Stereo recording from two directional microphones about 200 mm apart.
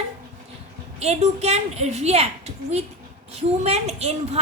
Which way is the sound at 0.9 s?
35° right (ahead or behind).